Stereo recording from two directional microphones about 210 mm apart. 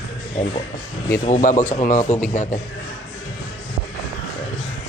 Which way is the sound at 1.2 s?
35° left (ahead or behind).